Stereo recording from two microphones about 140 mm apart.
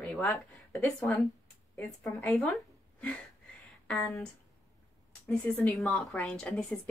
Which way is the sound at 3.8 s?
10° left (ahead or behind).